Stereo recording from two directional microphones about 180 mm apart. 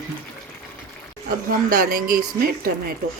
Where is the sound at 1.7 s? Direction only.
55° right (ahead or behind).